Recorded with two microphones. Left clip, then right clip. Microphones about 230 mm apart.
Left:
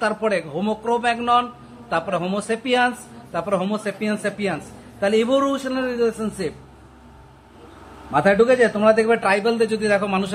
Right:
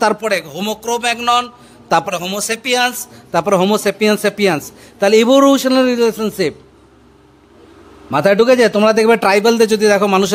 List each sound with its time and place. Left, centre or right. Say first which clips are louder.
0.0 s a man's voice: right 6 dB; right
8.1 s a man's voice: right 5 dB; right